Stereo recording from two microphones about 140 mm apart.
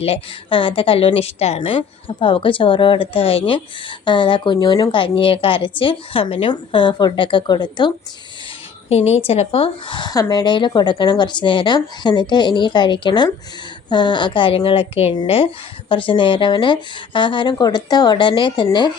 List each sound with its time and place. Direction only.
0.0 s a woman's voice: 40° left (ahead or behind)
8.9 s a woman's voice: 50° left (ahead or behind); by 18.9 s 35° left (ahead or behind)